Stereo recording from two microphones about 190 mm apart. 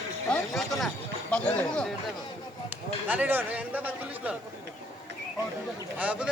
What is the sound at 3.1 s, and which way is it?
A man's voice, 10° right (ahead or behind).